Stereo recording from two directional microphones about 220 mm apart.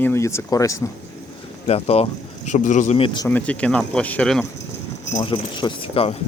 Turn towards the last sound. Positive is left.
turn(degrees=25)  # may be behind; listen again after turning